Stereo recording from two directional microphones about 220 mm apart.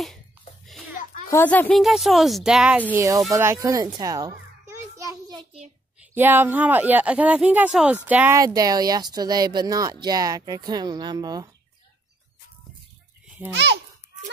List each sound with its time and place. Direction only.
0.7 s a sound: centre (ahead or behind)
1.3 s speech: 10° left (ahead or behind)
2.9 s speech: 15° right (ahead or behind)
3.3 s children playing: 10° right (ahead or behind)
5.9 s speech: 10° right (ahead or behind)
13.5 s a child's voice: 55° right (ahead or behind)